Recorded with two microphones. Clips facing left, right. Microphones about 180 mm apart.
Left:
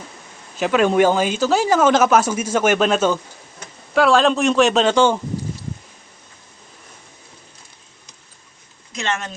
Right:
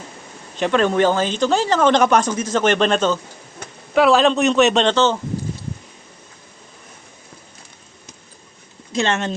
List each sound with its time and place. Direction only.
0.5 s a man's voice: 5° left (ahead or behind)
8.9 s speech: 30° right (ahead or behind)